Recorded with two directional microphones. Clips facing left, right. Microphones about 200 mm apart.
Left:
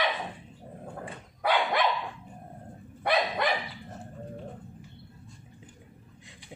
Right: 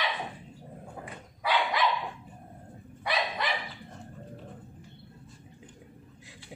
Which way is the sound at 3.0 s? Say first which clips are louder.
Left 5 dB; 55° left (ahead or behind).